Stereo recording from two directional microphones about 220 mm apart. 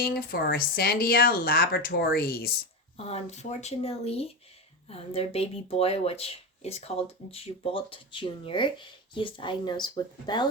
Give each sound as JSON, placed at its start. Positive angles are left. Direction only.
{"t": 0.0, "sound": "speech", "side_deg": 40}
{"t": 3.0, "sound": "speech", "side_deg": 30}